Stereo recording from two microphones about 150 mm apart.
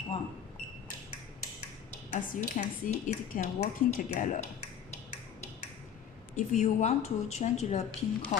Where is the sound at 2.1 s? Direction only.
60° left (ahead or behind).